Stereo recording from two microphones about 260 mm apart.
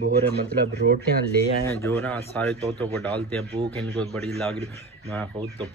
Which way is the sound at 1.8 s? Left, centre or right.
Centre.